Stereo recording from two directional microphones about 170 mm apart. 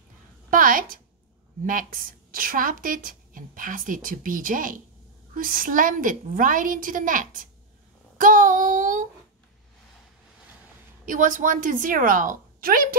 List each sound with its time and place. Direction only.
0.5 s a woman's voice: 55° right (ahead or behind)
11.1 s a woman's voice: 50° right (ahead or behind)